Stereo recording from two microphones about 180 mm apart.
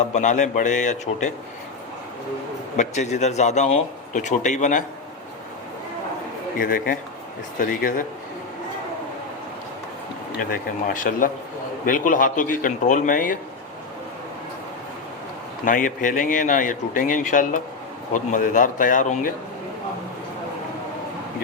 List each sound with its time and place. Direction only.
0.0 s a man's voice: 40° left (ahead or behind)
2.7 s a man's voice: 40° left (ahead or behind)
6.6 s speech: 55° left (ahead or behind)
10.5 s speech: 50° left (ahead or behind)
15.6 s speech: 45° left (ahead or behind)